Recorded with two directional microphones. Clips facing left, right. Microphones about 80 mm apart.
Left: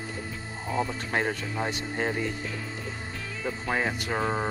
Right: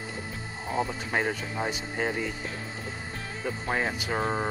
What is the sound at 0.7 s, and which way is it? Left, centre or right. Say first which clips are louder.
Speech: even; right.